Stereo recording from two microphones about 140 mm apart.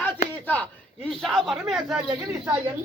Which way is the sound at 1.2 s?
Centre (ahead or behind).